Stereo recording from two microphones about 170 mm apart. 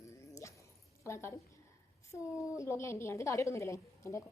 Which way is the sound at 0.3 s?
20° left (ahead or behind).